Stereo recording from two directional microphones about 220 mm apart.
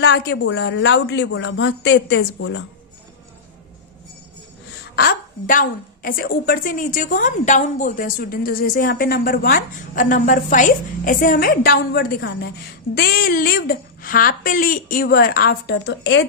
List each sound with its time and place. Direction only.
0.0 s a woman's voice: 50° left (ahead or behind)
4.9 s a woman's voice: 40° left (ahead or behind)